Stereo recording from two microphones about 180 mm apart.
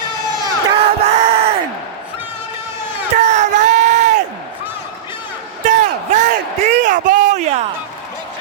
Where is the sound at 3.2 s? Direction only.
40° right (ahead or behind).